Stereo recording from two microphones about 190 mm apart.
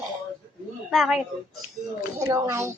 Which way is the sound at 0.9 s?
Centre (ahead or behind).